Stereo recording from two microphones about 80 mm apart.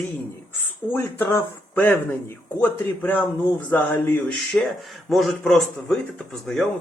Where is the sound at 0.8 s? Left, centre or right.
Centre.